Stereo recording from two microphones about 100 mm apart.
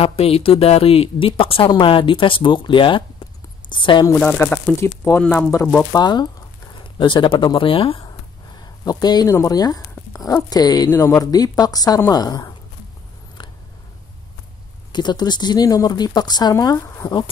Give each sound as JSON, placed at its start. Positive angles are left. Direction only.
{"t": 0.0, "sound": "a woman's voice", "side_deg": 80}
{"t": 4.2, "sound": "speech", "side_deg": 10}
{"t": 4.7, "sound": "speech", "side_deg": 25}
{"t": 5.2, "sound": "speech", "side_deg": 15}
{"t": 5.9, "sound": "speech", "side_deg": 45}
{"t": 8.8, "sound": "speech", "side_deg": 40}
{"t": 10.9, "sound": "speech", "side_deg": 30}
{"t": 14.9, "sound": "speech", "side_deg": 45}